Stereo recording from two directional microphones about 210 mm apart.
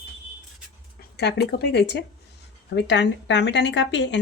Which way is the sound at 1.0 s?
50° left (ahead or behind).